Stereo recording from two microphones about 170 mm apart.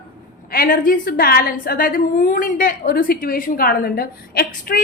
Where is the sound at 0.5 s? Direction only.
55° left (ahead or behind).